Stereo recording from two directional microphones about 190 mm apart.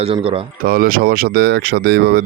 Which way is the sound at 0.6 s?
50° right (ahead or behind).